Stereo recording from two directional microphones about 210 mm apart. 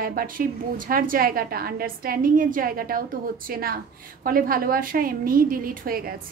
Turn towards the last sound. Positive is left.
turn(degrees=-45)  # may be behind; listen again after turning